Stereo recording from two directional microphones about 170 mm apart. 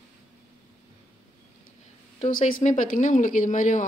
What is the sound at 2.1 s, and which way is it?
Speech, 45° left (ahead or behind).